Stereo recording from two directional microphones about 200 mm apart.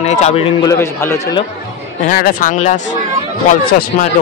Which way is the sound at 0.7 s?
10° left (ahead or behind).